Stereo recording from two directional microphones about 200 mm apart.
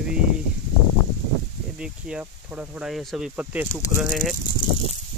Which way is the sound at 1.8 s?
5° right (ahead or behind).